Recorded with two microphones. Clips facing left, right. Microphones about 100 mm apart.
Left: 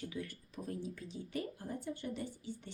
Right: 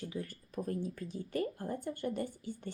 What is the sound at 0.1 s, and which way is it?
A woman's voice, 40° right (ahead or behind).